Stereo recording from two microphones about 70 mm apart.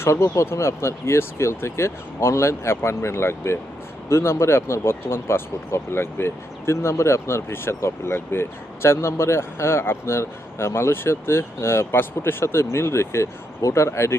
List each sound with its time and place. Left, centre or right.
0.0 s speech: left